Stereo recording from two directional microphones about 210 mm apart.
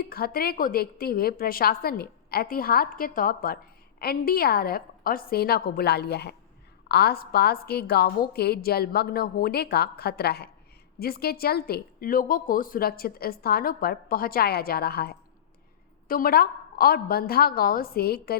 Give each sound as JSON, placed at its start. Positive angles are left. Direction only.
{"t": 0.0, "sound": "a woman's voice", "side_deg": 45}